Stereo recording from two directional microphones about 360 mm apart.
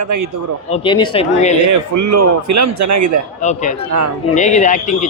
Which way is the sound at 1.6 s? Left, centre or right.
Right.